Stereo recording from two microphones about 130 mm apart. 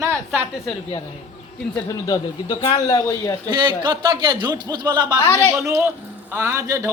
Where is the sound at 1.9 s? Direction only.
30° left (ahead or behind).